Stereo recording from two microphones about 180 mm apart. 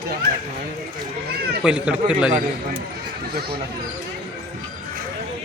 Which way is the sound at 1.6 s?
5° right (ahead or behind).